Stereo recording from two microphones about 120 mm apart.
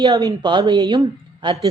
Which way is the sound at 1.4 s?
40° right (ahead or behind).